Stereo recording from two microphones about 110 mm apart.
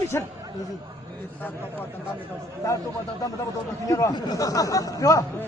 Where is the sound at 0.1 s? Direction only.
25° left (ahead or behind).